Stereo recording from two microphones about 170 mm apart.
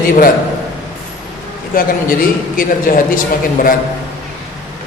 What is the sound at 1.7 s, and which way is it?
Speech, 55° left (ahead or behind).